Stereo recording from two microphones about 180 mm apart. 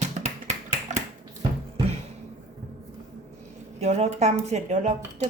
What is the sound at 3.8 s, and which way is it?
Speech, 40° right (ahead or behind).